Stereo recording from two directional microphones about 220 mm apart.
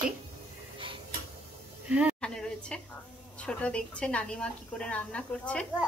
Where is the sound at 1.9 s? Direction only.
Centre (ahead or behind).